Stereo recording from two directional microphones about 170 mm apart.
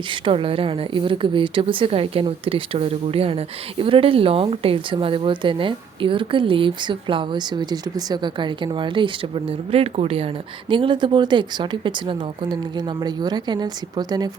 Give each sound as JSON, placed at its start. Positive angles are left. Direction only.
{"t": 0.1, "sound": "a woman's voice", "side_deg": -30}